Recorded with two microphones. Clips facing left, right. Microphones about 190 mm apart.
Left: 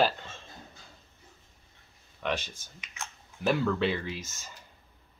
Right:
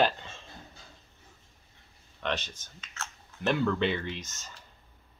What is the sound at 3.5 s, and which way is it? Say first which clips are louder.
Speech: even; centre (ahead or behind).